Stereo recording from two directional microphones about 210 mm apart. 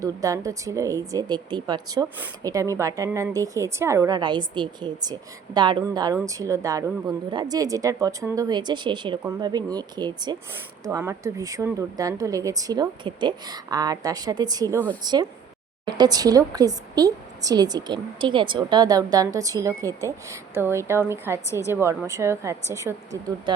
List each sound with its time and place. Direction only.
0.0 s a woman's voice: 15° right (ahead or behind)